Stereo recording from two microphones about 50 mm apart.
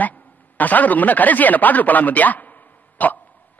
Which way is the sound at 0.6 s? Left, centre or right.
Left.